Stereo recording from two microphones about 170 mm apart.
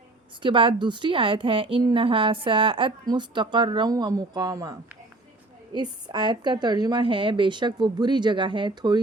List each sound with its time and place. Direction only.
0.4 s a woman's voice: 30° right (ahead or behind)